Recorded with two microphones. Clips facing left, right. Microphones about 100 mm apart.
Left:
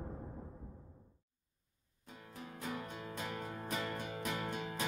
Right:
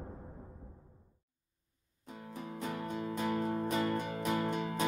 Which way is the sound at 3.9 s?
55° right (ahead or behind).